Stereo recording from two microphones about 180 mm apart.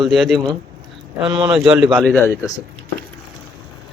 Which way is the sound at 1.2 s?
25° right (ahead or behind).